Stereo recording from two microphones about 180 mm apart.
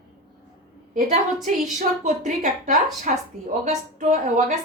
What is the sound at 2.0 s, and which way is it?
A woman's voice, 45° right (ahead or behind).